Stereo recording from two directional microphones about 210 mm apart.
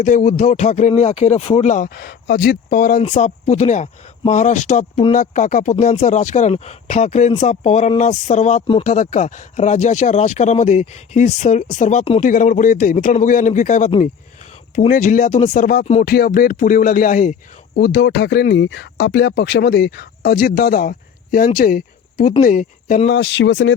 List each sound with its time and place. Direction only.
0.0 s speech: 35° left (ahead or behind)
16.0 s speech: 45° left (ahead or behind)
23.0 s speech: 60° left (ahead or behind)